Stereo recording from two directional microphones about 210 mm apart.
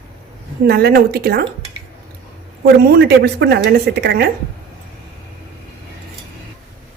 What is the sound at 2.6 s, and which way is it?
A woman's voice, 50° right (ahead or behind).